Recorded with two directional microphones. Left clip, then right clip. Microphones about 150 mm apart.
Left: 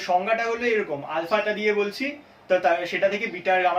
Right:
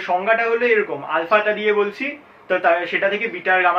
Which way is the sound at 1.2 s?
30° left (ahead or behind).